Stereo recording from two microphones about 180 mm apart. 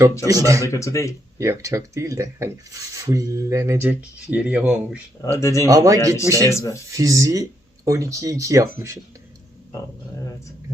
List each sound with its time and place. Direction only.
0.3 s speech: 20° right (ahead or behind)
0.7 s speech: 15° left (ahead or behind)
1.4 s speech: 15° right (ahead or behind)
5.2 s speech: 15° left (ahead or behind)
5.6 s speech: 20° right (ahead or behind)
6.5 s speech: 15° left (ahead or behind)
6.9 s speech: 20° right (ahead or behind)